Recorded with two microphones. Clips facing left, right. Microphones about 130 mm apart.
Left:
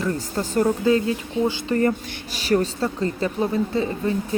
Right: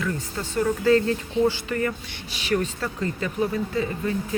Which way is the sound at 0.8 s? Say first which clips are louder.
Even; 15° left (ahead or behind).